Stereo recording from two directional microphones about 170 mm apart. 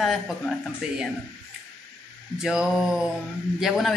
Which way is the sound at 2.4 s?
5° right (ahead or behind).